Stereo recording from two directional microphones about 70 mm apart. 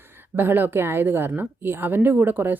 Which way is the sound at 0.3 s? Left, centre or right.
Right.